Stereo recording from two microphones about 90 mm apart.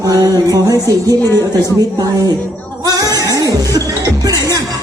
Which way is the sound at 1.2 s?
30° left (ahead or behind).